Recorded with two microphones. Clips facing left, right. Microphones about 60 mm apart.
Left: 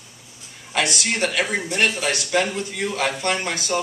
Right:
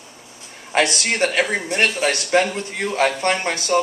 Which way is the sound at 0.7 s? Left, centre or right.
Right.